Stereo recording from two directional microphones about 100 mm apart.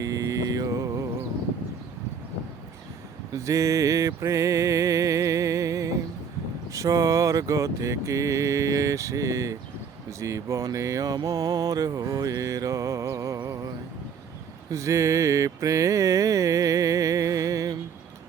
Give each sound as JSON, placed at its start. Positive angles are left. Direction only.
{"t": 0.0, "sound": "mantra", "side_deg": -35}
{"t": 3.3, "sound": "mantra", "side_deg": -30}
{"t": 14.7, "sound": "mantra", "side_deg": -30}